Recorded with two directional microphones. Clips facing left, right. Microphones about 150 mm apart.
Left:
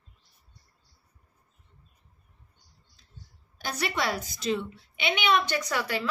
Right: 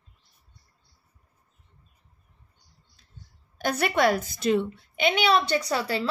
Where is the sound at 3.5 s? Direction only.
55° right (ahead or behind).